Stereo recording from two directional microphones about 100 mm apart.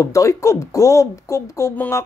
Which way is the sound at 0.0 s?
30° left (ahead or behind).